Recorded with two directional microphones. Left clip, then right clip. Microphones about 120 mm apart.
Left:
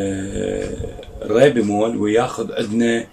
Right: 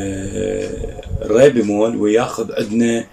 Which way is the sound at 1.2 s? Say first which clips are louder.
Right 3 dB; 5° right (ahead or behind).